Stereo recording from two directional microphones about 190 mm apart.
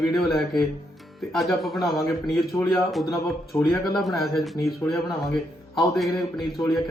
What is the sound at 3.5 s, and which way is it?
Speech, 15° left (ahead or behind).